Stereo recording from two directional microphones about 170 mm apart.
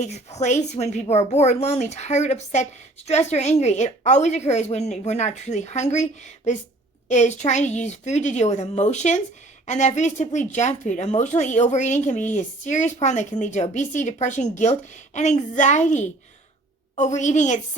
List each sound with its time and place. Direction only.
0.0 s a woman's voice: 40° left (ahead or behind)